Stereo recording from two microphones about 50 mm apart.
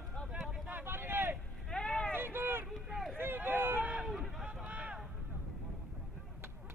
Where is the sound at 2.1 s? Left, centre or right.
Right.